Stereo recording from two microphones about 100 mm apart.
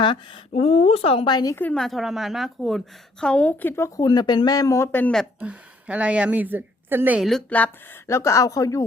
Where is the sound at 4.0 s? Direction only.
45° left (ahead or behind).